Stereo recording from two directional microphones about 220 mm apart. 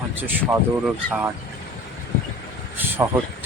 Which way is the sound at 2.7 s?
10° right (ahead or behind).